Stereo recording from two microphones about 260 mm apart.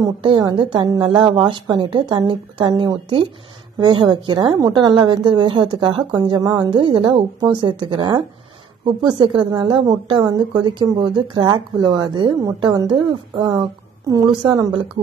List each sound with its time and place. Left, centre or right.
0.0 s a woman's voice: centre